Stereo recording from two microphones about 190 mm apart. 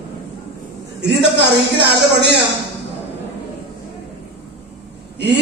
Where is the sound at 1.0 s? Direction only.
65° right (ahead or behind).